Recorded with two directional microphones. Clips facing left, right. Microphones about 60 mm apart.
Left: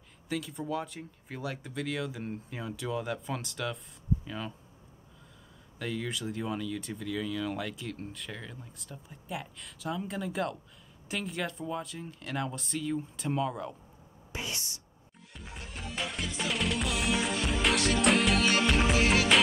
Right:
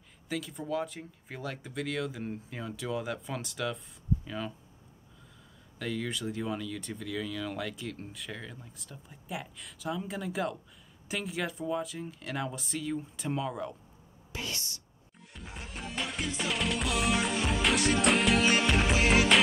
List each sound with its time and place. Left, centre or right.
0.3 s speech: centre
5.8 s speech: centre
14.3 s whispering: centre
15.3 s music: centre